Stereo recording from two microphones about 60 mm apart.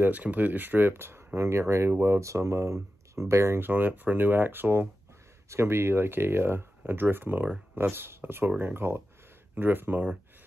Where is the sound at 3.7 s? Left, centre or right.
Right.